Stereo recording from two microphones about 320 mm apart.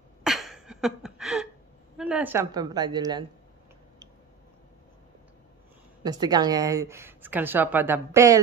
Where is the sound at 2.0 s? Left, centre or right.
Centre.